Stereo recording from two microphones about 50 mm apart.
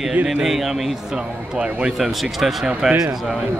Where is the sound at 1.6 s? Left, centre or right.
Centre.